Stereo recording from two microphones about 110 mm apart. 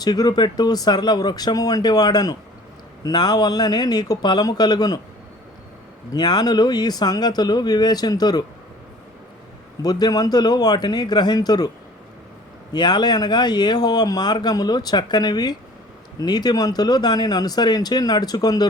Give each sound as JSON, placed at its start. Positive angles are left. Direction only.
{"t": 0.0, "sound": "speech", "side_deg": 40}
{"t": 6.1, "sound": "speech", "side_deg": 40}
{"t": 9.8, "sound": "speech", "side_deg": 35}
{"t": 12.7, "sound": "speech", "side_deg": 40}